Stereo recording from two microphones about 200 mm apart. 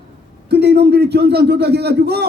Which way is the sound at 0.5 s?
55° right (ahead or behind).